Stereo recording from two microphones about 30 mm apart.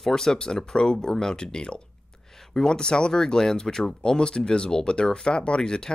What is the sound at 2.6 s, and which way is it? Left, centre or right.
Speech, left.